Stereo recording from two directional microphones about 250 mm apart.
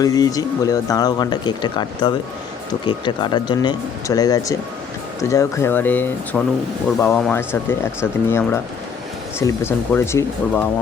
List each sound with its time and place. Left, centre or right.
0.0 s speech: centre